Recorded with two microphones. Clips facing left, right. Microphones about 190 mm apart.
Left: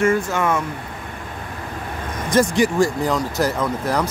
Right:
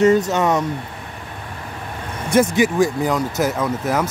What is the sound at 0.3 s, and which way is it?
Speech, 20° right (ahead or behind).